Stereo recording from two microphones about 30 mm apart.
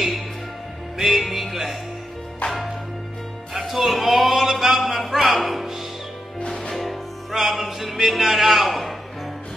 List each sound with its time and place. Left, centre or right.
0.9 s music: centre
3.5 s a sound: centre
6.4 s music: left
6.7 s music: centre